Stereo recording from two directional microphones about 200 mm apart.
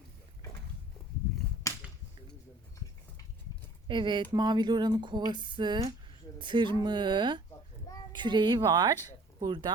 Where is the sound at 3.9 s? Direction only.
25° right (ahead or behind).